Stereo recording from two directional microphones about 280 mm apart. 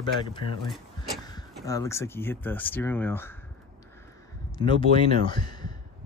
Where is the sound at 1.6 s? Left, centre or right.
Centre.